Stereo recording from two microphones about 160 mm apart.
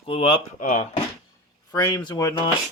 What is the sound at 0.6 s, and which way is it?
Speech, 55° left (ahead or behind).